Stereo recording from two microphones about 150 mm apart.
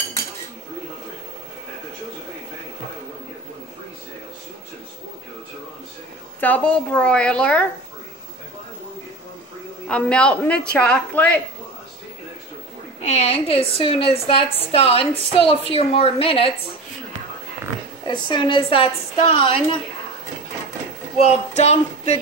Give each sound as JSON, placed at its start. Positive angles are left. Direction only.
{"t": 6.4, "sound": "a man's voice", "side_deg": 10}
{"t": 9.8, "sound": "a man's voice", "side_deg": 5}
{"t": 13.0, "sound": "a woman's voice", "side_deg": 45}
{"t": 18.0, "sound": "a woman's voice", "side_deg": 30}
{"t": 21.2, "sound": "a sound", "side_deg": 45}